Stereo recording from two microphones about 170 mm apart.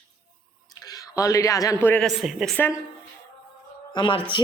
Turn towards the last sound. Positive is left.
turn(degrees=25)  # may be behind; listen again after turning